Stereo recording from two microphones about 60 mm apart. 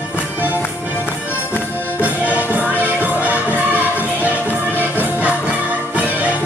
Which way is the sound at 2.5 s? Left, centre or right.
Right.